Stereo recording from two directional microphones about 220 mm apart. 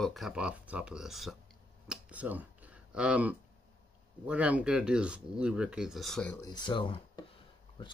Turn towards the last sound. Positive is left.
turn(degrees=20)  # may be behind; listen again after turning